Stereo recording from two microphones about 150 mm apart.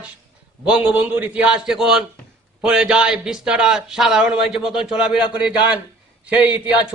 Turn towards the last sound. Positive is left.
turn(degrees=-10)  # may be behind; listen again after turning